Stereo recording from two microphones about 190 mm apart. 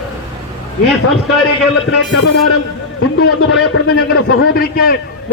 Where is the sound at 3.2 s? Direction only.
55° left (ahead or behind).